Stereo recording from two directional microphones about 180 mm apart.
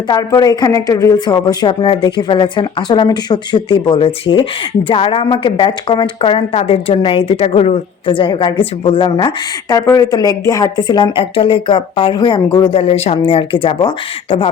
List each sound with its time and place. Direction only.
0.1 s speech: 20° left (ahead or behind)